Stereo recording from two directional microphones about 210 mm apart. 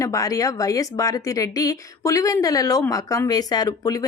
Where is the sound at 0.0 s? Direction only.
15° left (ahead or behind).